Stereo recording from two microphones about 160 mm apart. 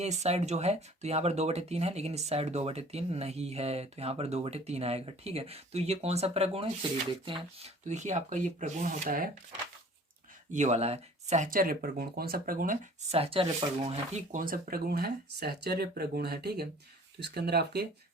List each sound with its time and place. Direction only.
0.0 s speech: 45° right (ahead or behind)
7.9 s speech: 50° right (ahead or behind)
10.5 s speech: 45° right (ahead or behind)
13.1 s speech: 35° right (ahead or behind)
14.3 s speech: 60° right (ahead or behind); by 17.8 s 90° right